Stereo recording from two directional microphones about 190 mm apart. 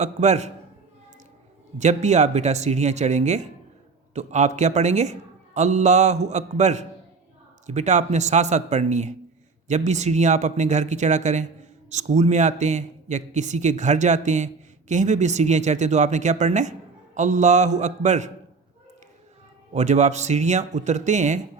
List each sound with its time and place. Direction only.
0.0 s a man's voice: 35° right (ahead or behind)
1.8 s a man's voice: 35° right (ahead or behind)
19.7 s a man's voice: 35° right (ahead or behind)